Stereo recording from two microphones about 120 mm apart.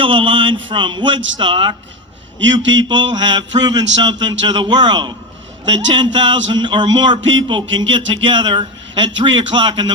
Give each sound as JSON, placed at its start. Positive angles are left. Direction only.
{"t": 0.0, "sound": "speech", "side_deg": -45}